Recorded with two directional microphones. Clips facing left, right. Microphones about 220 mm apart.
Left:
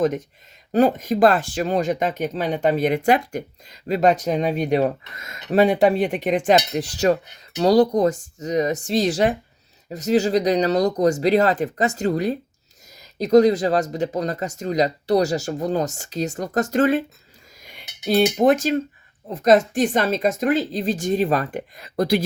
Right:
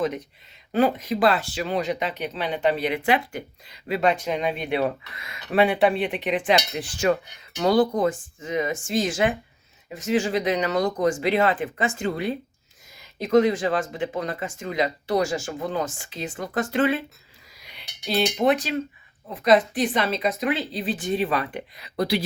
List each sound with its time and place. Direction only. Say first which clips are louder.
0.7 s speech: left 4 dB; 45° left (ahead or behind)
17.6 s cutlery: left 6 dB; 45° left (ahead or behind)
19.3 s speech: left 3 dB; 45° left (ahead or behind)